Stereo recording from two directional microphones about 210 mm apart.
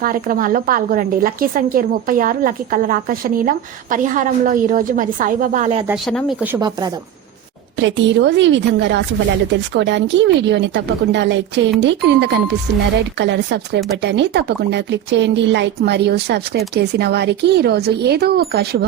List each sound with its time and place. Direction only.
0.0 s a woman's voice: 40° right (ahead or behind)
5.9 s speech: centre (ahead or behind)
6.6 s speech: 20° right (ahead or behind)
7.8 s a woman's voice: 60° right (ahead or behind)